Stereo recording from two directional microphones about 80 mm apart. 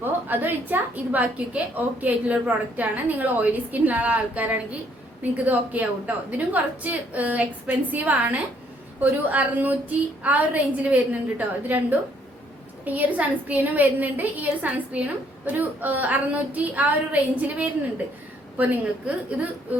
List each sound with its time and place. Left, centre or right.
0.0 s a woman's voice: right